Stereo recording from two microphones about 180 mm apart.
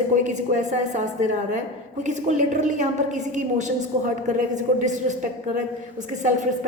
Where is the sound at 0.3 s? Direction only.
40° right (ahead or behind).